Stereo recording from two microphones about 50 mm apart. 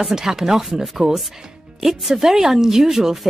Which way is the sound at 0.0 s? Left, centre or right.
Centre.